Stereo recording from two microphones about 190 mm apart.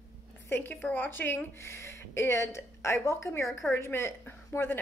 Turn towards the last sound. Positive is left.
turn(degrees=10)  # may be behind; listen again after turning